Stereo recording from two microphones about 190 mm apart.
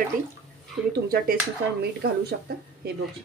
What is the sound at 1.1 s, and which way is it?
Speech, 55° right (ahead or behind).